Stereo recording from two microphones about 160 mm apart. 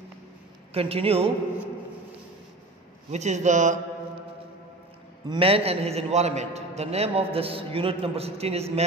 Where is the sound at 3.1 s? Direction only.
45° right (ahead or behind).